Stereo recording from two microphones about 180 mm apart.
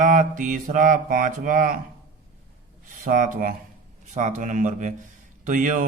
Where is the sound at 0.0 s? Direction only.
45° right (ahead or behind).